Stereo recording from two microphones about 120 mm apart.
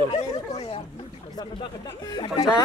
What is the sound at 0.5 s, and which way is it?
Speech, 55° left (ahead or behind).